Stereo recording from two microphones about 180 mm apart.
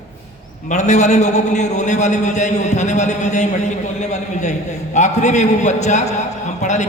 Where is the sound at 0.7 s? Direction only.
40° left (ahead or behind).